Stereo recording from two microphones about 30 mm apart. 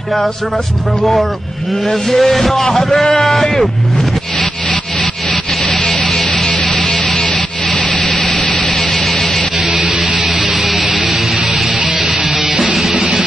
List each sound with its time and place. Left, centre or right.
2.0 s a man's voice: centre
5.0 s music: centre
7.8 s rub: left
8.5 s music: centre
9.8 s music: centre